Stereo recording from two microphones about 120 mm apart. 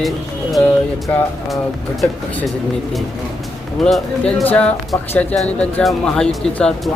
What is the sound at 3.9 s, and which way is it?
Speech, centre (ahead or behind).